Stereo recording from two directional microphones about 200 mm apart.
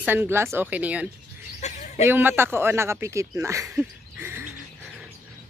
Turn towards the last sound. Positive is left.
turn(degrees=-10)  # may be behind; listen again after turning